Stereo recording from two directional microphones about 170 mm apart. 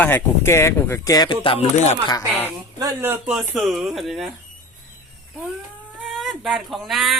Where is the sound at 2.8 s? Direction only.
10° right (ahead or behind).